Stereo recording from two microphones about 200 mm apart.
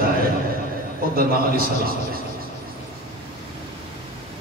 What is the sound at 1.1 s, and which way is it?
A man's voice, 45° right (ahead or behind).